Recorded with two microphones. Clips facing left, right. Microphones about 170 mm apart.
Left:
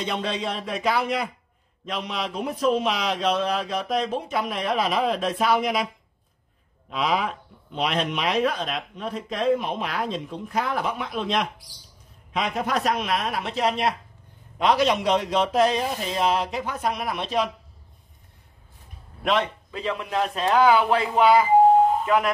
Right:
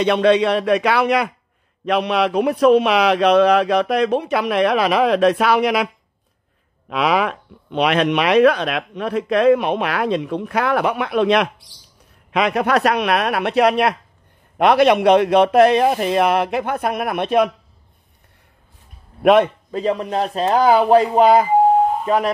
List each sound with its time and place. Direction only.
0.0 s speech: 70° right (ahead or behind)
6.9 s speech: 70° right (ahead or behind)
19.2 s a man's voice: 55° right (ahead or behind); by 22.3 s 35° right (ahead or behind)